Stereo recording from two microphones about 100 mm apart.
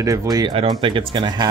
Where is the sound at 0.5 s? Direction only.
60° right (ahead or behind).